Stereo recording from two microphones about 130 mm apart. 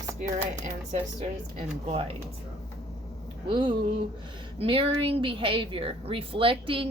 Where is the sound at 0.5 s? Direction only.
65° right (ahead or behind).